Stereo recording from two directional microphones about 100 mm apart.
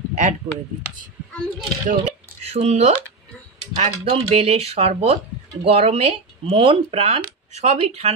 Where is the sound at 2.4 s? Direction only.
85° right.